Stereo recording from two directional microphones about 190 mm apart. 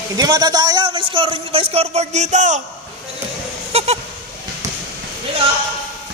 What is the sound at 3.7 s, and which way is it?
Goat, 35° right (ahead or behind).